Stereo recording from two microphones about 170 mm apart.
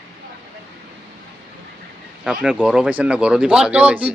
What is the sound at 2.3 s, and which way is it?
Speech, 5° right (ahead or behind).